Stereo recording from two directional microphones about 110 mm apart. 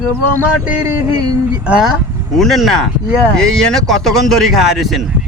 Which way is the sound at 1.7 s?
10° right (ahead or behind).